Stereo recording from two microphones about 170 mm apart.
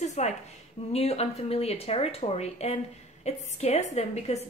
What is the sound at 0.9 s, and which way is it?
A woman's voice, 40° left (ahead or behind).